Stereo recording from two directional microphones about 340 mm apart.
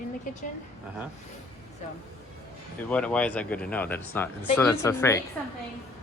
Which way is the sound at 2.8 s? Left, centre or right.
Centre.